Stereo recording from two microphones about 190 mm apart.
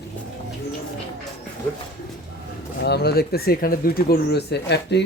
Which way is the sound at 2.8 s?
60° left (ahead or behind).